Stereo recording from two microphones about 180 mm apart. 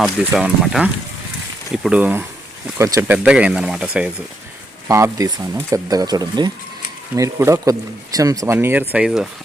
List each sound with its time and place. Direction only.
0.0 s speech: 5° right (ahead or behind)
4.9 s speech: 15° right (ahead or behind)